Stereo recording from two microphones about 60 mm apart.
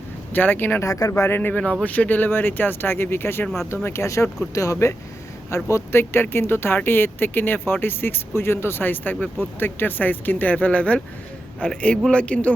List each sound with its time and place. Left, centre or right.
0.3 s speech: left
0.9 s speech: left
1.1 s speech: left
1.4 s a man's voice: left